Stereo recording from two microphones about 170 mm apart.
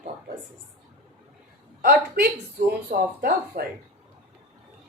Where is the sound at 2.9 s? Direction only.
60° right (ahead or behind).